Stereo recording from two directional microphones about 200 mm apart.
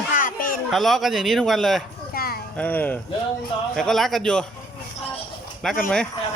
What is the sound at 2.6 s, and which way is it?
Speech, 10° left (ahead or behind).